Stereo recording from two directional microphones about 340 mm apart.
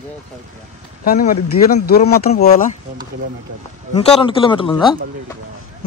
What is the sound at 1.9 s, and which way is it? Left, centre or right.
Speech, left.